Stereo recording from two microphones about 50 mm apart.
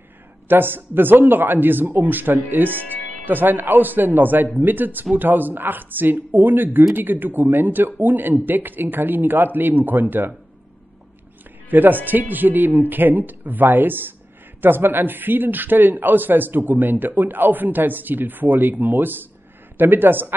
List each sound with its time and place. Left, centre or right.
0.5 s speech: right
11.7 s speech: right